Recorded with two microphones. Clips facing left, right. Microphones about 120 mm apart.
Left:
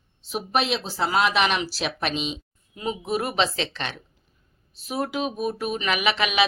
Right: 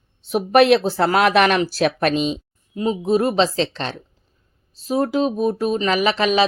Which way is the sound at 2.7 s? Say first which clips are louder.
Right 8 dB; 30° right (ahead or behind).